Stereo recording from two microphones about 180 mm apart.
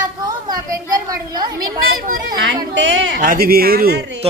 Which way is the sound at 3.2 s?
50° right (ahead or behind).